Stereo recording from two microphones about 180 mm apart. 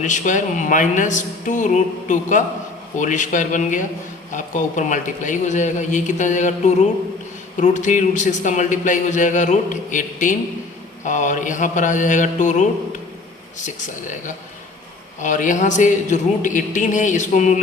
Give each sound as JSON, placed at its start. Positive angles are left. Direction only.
{"t": 0.0, "sound": "speech", "side_deg": 45}
{"t": 7.6, "sound": "speech", "side_deg": 45}
{"t": 15.2, "sound": "speech", "side_deg": 45}